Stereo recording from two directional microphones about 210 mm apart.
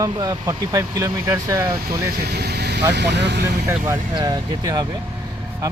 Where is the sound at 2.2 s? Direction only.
50° right (ahead or behind).